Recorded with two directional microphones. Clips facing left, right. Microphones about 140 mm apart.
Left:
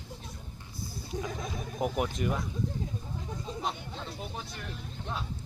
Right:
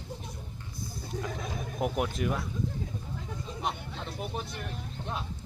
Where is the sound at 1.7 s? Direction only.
Centre (ahead or behind).